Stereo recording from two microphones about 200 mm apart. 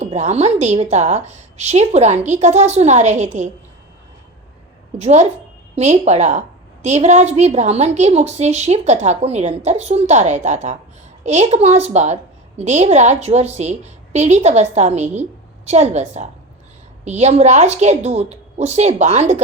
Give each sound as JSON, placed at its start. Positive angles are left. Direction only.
{"t": 0.0, "sound": "a woman's voice", "side_deg": -35}
{"t": 4.9, "sound": "a woman's voice", "side_deg": -35}